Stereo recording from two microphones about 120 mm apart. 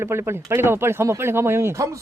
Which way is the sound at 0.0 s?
20° right (ahead or behind).